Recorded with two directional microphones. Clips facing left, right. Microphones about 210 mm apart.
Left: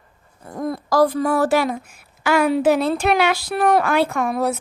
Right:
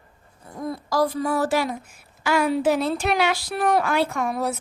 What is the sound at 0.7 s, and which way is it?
A woman's voice, 50° left (ahead or behind).